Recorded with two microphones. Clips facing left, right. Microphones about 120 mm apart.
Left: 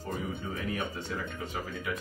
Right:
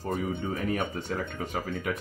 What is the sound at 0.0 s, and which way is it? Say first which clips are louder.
Speech: right 5 dB; 55° right (ahead or behind).